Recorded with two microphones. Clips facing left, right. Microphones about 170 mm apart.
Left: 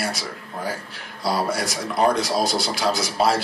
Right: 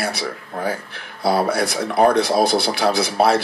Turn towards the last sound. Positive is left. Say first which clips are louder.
# right 4 dB
turn(degrees=-60)  # may be behind; listen again after turning